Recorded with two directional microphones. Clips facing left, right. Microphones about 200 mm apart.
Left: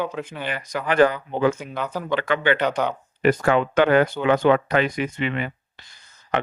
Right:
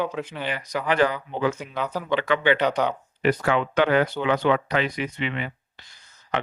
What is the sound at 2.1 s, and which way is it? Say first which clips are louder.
Speech: even; 50° left (ahead or behind).